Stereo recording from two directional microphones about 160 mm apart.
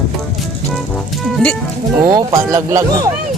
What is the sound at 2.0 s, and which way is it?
Speech, 20° right (ahead or behind).